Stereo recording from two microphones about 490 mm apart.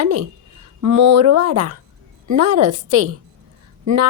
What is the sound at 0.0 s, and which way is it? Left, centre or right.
A woman's voice, right.